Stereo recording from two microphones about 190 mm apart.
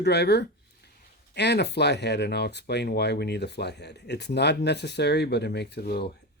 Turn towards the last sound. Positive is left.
turn(degrees=55)  # may be behind; listen again after turning